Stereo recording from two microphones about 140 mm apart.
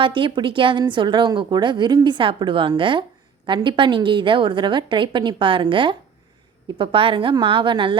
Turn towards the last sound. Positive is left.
turn(degrees=-35)  # may be behind; listen again after turning